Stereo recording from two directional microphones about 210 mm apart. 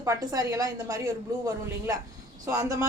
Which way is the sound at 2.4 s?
15° right (ahead or behind).